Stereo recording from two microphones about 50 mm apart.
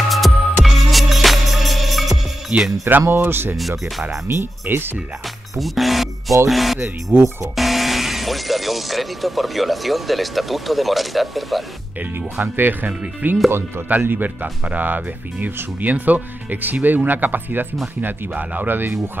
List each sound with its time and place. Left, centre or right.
0.1 s music: centre
2.5 s music: right
3.1 s speech: right
4.6 s speech: right
5.6 s speech: centre
12.4 s speech: right
13.5 s speech: right
13.8 s speech: right